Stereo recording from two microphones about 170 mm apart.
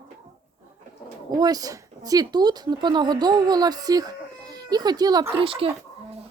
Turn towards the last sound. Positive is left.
turn(degrees=-30)  # may be behind; listen again after turning